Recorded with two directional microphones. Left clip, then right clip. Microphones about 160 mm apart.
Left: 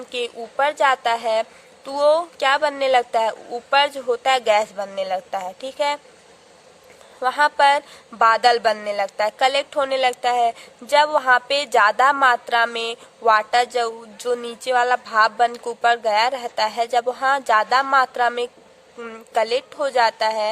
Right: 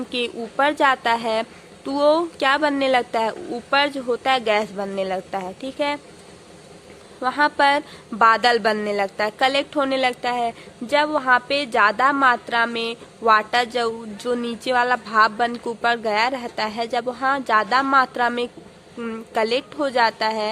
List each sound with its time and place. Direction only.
0.1 s a woman's voice: 30° left (ahead or behind)
7.2 s a woman's voice: 35° left (ahead or behind)